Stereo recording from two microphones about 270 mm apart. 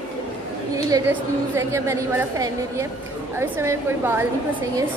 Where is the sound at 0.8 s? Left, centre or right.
Centre.